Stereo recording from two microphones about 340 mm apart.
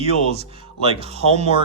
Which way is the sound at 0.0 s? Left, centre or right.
Centre.